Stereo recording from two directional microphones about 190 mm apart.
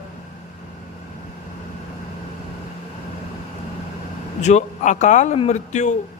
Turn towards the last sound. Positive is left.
turn(degrees=40)  # may be behind; listen again after turning